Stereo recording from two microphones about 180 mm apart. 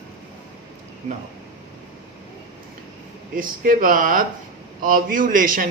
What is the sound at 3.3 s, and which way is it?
A man's voice, 50° right (ahead or behind).